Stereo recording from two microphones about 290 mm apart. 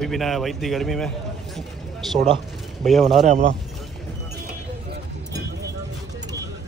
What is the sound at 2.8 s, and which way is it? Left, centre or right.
Speech, centre.